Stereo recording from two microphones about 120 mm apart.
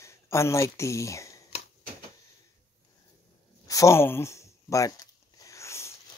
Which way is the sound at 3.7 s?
25° left (ahead or behind).